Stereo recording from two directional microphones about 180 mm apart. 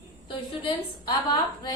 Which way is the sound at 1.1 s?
25° left (ahead or behind).